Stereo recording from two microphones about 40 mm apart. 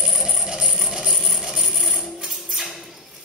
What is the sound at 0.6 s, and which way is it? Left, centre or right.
Mechanisms, centre.